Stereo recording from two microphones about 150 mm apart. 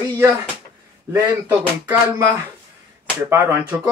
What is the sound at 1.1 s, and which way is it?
Speech, 10° right (ahead or behind).